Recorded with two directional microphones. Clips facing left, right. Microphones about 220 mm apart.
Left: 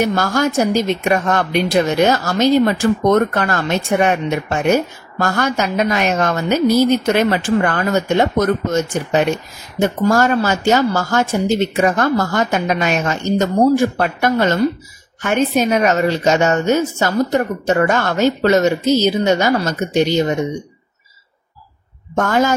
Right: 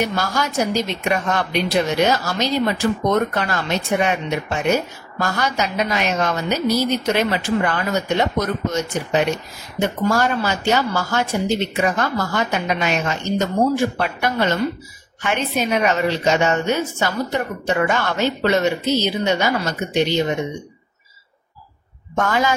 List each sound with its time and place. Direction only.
0.0 s a woman's voice: 50° left (ahead or behind)
22.1 s a woman's voice: 45° left (ahead or behind)